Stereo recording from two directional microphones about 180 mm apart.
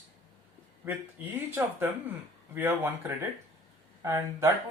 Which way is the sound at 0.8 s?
10° right (ahead or behind).